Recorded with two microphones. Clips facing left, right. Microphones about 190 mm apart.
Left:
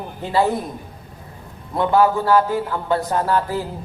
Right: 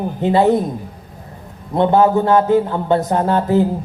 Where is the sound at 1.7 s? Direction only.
25° right (ahead or behind).